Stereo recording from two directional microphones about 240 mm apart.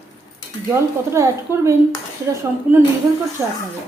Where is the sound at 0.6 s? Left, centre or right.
Centre.